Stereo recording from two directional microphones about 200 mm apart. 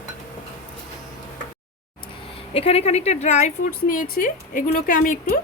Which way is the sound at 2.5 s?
30° left (ahead or behind).